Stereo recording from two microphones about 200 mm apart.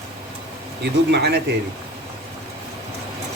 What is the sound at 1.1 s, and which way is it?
Speech, 55° right (ahead or behind).